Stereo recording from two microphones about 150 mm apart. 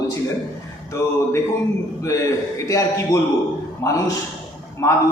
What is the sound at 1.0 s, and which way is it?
Speech, 20° left (ahead or behind).